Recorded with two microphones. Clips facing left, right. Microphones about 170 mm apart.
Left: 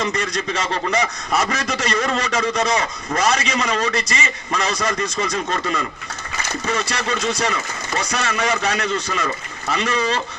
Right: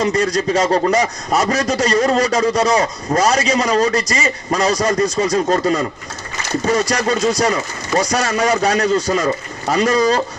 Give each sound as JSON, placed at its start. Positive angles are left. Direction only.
{"t": 0.0, "sound": "a man's voice", "side_deg": -40}